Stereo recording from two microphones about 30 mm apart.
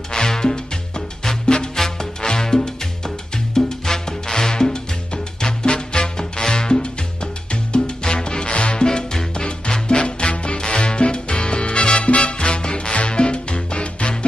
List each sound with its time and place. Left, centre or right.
0.1 s music: left
1.8 s music: centre
2.2 s music: left
8.8 s music: left